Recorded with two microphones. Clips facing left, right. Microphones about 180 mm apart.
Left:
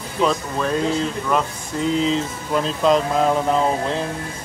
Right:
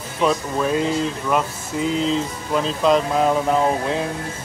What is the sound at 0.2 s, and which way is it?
Speech, 5° right (ahead or behind).